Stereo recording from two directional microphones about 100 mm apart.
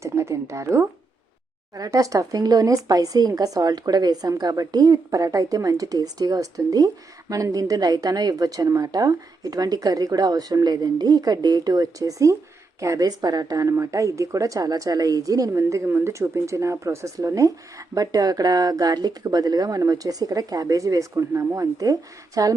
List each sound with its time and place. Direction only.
0.0 s a woman's voice: 30° right (ahead or behind)